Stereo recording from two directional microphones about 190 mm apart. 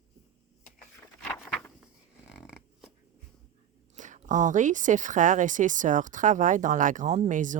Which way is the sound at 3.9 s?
40° right (ahead or behind).